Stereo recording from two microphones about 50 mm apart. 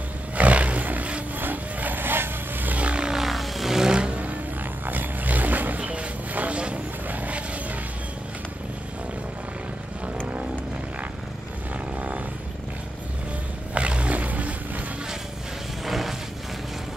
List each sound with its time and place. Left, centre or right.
0.4 s roar: right
1.4 s vehicle: right
2.8 s vehicle: right
3.2 s vehicle: centre; by 4.4 s right
4.8 s a sound: right
7.1 s vehicle: right
13.7 s roaring cats: right
15.8 s music: centre